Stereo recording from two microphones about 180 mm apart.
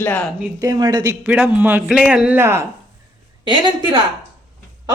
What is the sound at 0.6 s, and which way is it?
Speech, 20° right (ahead or behind).